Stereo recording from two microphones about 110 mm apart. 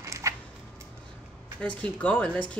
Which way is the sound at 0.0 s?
30° right (ahead or behind).